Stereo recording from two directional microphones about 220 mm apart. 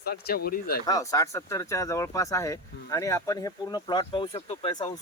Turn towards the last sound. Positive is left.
turn(degrees=20)  # may be behind; listen again after turning